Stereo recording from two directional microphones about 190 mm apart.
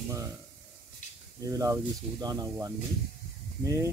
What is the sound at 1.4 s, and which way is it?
Speech, 15° right (ahead or behind).